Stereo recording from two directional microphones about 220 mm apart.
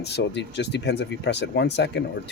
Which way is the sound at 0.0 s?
50° left (ahead or behind).